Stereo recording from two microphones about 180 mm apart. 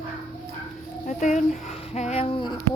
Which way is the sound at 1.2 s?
45° left (ahead or behind).